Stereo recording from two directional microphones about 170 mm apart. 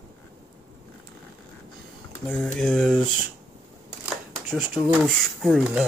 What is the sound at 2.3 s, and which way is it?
Speech, 5° left (ahead or behind).